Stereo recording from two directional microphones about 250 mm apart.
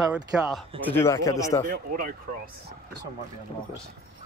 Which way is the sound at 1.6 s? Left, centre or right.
Right.